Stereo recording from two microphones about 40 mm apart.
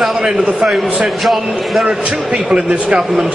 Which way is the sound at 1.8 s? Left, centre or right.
Right.